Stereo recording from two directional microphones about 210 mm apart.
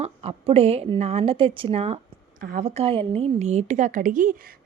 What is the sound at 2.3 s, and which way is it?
A woman's voice, 40° right (ahead or behind).